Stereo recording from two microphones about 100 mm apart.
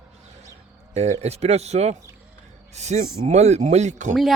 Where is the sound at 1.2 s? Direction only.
90° right.